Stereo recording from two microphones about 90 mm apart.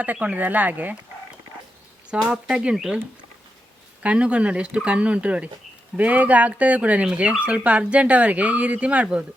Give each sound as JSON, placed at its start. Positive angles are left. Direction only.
{"t": 0.0, "sound": "speech", "side_deg": -15}
{"t": 2.0, "sound": "speech", "side_deg": -10}
{"t": 4.0, "sound": "speech", "side_deg": -10}